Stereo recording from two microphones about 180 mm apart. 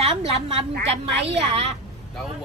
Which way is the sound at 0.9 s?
35° right (ahead or behind).